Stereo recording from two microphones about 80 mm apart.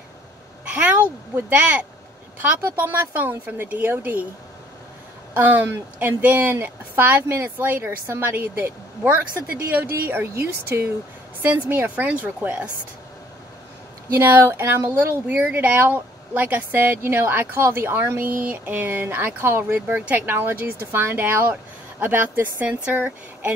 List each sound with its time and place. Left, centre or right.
0.7 s speech: right
5.3 s speech: right
11.9 s speech: centre
14.1 s speech: right
15.2 s speech: centre